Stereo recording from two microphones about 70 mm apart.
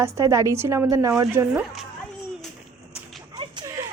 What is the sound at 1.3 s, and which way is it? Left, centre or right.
Speech, right.